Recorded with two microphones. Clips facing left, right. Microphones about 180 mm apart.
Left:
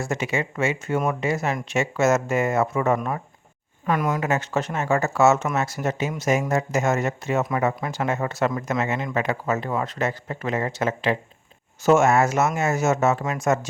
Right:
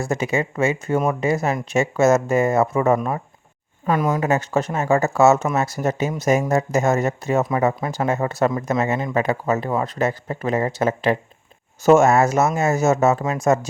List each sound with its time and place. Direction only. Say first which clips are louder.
0.0 s speech: right 4 dB; 35° right (ahead or behind)